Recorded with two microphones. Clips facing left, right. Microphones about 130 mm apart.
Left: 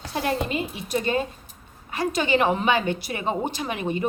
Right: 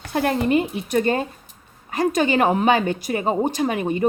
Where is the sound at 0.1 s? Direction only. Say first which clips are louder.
Right 6 dB; 55° right (ahead or behind).